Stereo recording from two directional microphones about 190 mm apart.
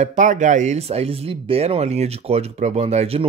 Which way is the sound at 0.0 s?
40° right (ahead or behind).